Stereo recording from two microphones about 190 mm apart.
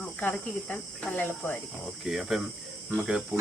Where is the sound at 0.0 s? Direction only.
5° left (ahead or behind).